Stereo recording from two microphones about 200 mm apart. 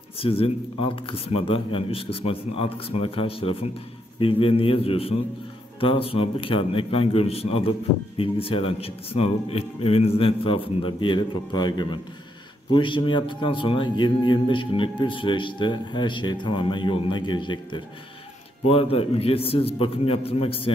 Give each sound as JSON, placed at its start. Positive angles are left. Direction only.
{"t": 0.2, "sound": "a man's voice", "side_deg": 30}